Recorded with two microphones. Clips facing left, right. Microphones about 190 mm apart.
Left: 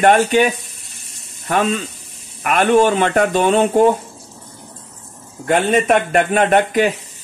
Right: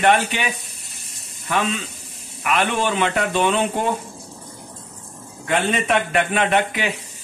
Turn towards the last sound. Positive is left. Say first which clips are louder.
# left 6 dB
turn(degrees=45)  # may be behind; listen again after turning